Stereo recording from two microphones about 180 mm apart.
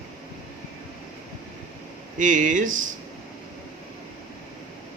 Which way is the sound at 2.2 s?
45° right (ahead or behind).